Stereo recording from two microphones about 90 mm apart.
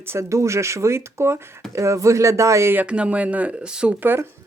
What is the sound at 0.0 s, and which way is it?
Speech, 30° right (ahead or behind).